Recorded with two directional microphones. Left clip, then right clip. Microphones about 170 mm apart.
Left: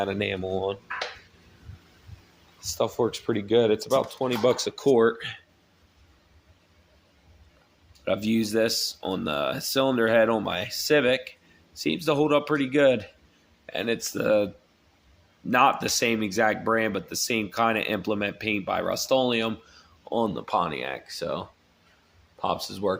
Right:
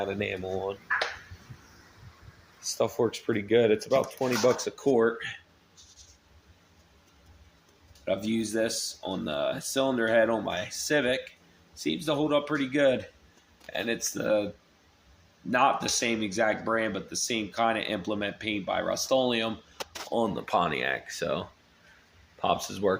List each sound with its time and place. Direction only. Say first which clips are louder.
0.0 s speech: left 4 dB; 25° left (ahead or behind)
2.6 s speech: left 1 dB; 10° left (ahead or behind); by 5.3 s 30° left (ahead or behind)
8.0 s speech: left 3 dB; 45° left (ahead or behind)
20.1 s speech: left 2 dB; 25° left (ahead or behind); by 21.4 s 10° left (ahead or behind)
22.7 s speech: even; 5° left (ahead or behind)